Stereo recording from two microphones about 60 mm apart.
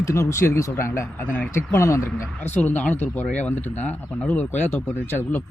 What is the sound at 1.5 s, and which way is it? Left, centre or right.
Speech, left.